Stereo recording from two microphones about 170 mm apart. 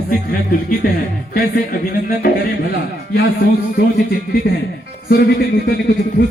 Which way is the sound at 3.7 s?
70° left (ahead or behind).